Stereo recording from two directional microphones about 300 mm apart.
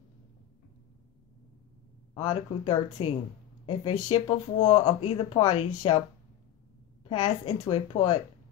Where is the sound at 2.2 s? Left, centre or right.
Centre.